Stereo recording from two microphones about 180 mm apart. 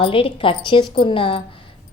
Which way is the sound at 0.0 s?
30° left (ahead or behind).